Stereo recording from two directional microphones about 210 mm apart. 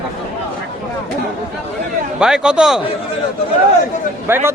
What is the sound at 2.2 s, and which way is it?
Speech, 5° right (ahead or behind).